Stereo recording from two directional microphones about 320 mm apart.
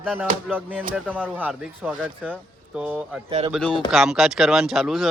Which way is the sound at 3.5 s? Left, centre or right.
Centre.